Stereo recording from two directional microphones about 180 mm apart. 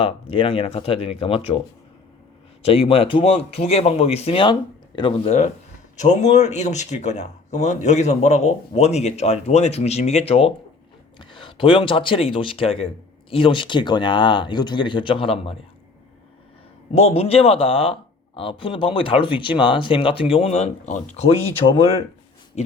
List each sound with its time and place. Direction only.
0.0 s speech: 30° left (ahead or behind)
2.6 s speech: 30° left (ahead or behind)
16.9 s speech: 35° left (ahead or behind)